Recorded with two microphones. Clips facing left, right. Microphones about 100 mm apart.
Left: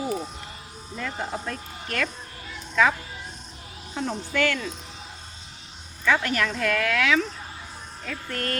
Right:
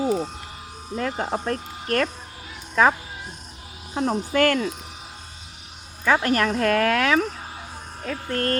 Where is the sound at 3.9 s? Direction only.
45° right (ahead or behind).